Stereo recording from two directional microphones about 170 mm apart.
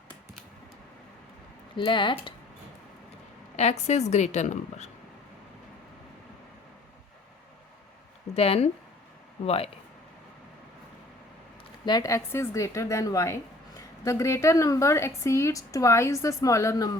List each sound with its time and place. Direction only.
1.7 s speech: 30° left (ahead or behind)
3.5 s a woman's voice: 40° left (ahead or behind)
8.4 s a woman's voice: 35° left (ahead or behind)
11.9 s a woman's voice: 20° left (ahead or behind)